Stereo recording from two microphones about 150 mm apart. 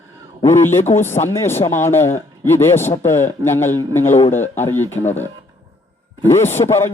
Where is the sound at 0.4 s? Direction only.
15° left (ahead or behind).